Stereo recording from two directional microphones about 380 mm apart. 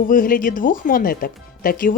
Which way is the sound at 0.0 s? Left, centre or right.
Left.